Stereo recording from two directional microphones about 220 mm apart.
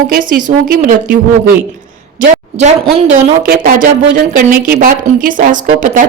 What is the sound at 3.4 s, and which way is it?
A woman's voice, 40° right (ahead or behind).